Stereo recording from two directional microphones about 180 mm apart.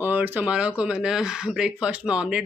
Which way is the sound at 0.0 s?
10° right (ahead or behind).